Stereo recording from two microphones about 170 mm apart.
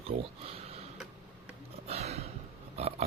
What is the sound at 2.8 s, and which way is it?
Pig, 35° right (ahead or behind).